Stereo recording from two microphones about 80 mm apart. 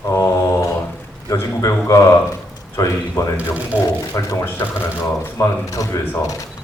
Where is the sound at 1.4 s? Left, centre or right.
Left.